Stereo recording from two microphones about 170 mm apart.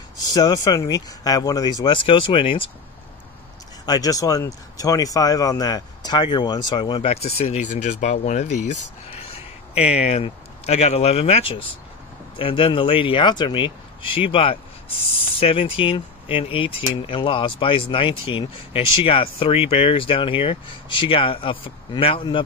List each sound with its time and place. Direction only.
0.2 s speech: 25° left (ahead or behind)
3.8 s speech: 20° left (ahead or behind)